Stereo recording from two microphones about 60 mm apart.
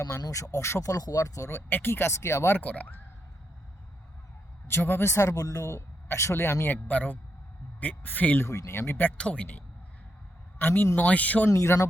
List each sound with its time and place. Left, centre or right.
0.2 s speech: left
1.7 s speech: left
2.6 s speech: left
4.7 s speech: left
5.4 s speech: left
5.6 s speech: left
6.8 s speech: left
8.4 s speech: left
9.1 s speech: centre
10.6 s speech: left
11.4 s speech: left